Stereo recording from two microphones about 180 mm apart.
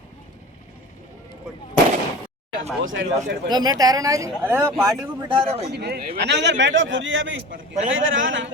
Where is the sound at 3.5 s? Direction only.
20° right (ahead or behind).